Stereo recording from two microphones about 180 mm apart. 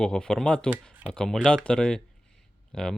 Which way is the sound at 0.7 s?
10° right (ahead or behind).